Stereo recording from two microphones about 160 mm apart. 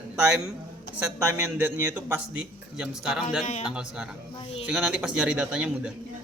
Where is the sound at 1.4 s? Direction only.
10° right (ahead or behind).